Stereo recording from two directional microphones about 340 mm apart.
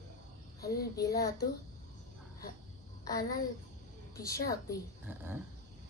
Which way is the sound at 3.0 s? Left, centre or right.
Centre.